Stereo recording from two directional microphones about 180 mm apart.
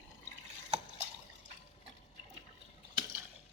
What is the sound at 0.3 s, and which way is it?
Drip, 40° right (ahead or behind).